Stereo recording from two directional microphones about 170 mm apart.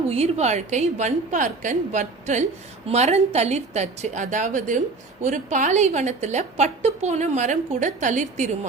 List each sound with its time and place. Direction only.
0.1 s a woman's voice: 40° right (ahead or behind)